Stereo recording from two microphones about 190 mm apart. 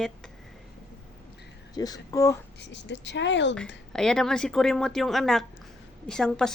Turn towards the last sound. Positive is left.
turn(degrees=5)  # may be behind; listen again after turning